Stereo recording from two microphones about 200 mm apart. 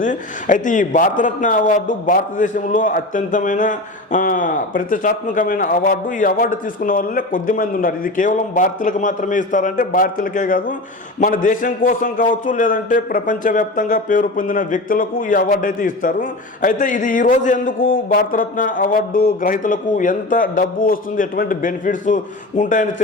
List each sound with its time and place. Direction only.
0.0 s a man's voice: 40° left (ahead or behind)